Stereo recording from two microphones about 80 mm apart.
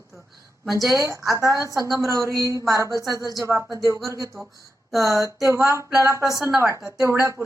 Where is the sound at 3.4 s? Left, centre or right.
Right.